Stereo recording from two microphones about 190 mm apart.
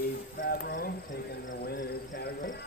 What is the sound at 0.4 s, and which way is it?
Cricket, 45° left (ahead or behind).